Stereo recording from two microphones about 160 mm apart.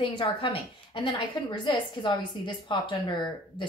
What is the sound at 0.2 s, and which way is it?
A woman's voice, 30° left (ahead or behind).